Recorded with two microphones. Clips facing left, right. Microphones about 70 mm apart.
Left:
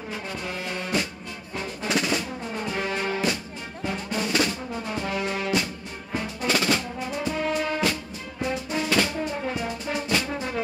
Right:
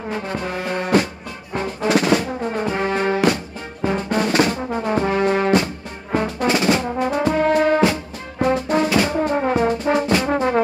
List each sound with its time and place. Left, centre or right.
0.1 s music: right
3.8 s brass instrument: right
6.4 s music: right
6.8 s brass instrument: right
8.4 s music: right
9.1 s brass instrument: right